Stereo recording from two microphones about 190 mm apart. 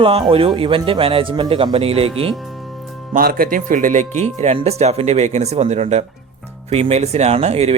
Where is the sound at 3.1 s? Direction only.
45° right (ahead or behind).